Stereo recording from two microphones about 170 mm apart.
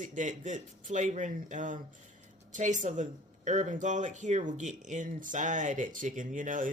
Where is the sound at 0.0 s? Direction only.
50° right (ahead or behind).